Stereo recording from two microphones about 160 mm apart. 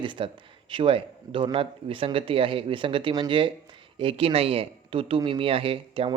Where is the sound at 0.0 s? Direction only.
30° right (ahead or behind).